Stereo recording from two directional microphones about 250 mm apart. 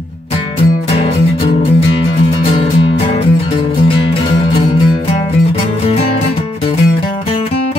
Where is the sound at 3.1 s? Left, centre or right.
Left.